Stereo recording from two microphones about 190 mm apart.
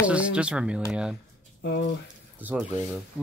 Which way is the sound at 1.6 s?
65° left (ahead or behind).